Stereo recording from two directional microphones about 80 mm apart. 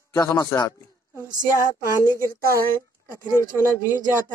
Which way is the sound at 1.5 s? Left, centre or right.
Right.